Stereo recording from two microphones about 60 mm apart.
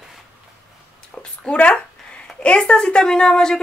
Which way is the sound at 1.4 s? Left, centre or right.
Centre.